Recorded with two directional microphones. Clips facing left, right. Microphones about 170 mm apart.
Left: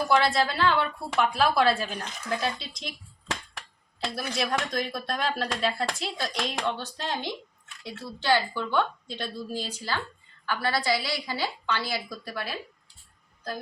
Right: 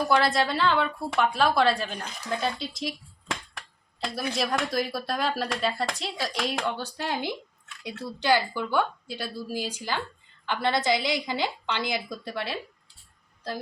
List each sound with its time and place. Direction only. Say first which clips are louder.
0.1 s speech: left 1 dB; centre (ahead or behind)
4.0 s a woman's voice: right 1 dB; centre (ahead or behind); by 12.5 s 25° right (ahead or behind)